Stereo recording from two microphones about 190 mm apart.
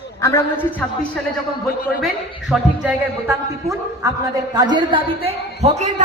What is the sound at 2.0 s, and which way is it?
A man's voice, 5° right (ahead or behind).